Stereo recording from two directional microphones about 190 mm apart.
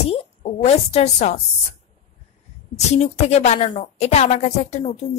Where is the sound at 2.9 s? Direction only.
35° left (ahead or behind).